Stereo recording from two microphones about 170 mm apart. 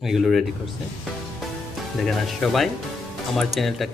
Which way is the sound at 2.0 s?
Centre (ahead or behind).